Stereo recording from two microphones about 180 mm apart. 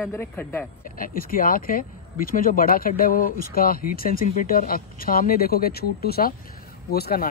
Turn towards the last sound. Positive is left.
turn(degrees=60)  # may be behind; listen again after turning